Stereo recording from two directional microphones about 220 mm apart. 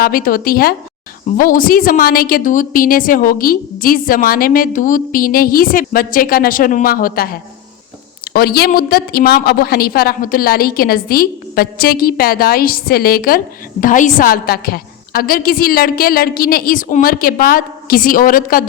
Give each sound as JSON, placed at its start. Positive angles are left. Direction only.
{"t": 0.0, "sound": "a woman's voice", "side_deg": 40}